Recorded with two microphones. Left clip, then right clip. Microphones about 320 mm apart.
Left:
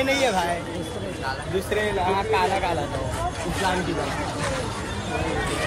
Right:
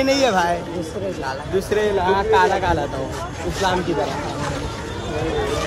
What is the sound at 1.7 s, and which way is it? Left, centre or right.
Speech, centre.